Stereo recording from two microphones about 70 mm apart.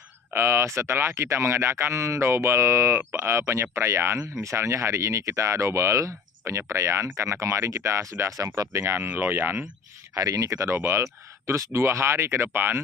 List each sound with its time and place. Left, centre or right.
0.3 s speech: right
9.0 s speech: right
10.2 s speech: right